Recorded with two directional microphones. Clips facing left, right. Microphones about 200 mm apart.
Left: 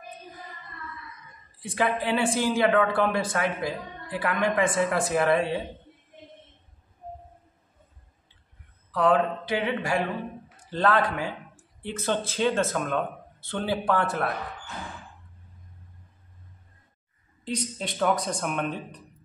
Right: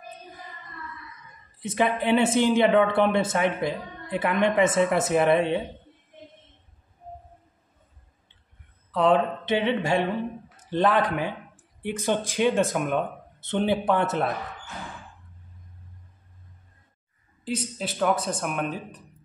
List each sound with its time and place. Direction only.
1.6 s a man's voice: 20° right (ahead or behind)
8.9 s a man's voice: 25° right (ahead or behind)
17.5 s speech: 5° right (ahead or behind)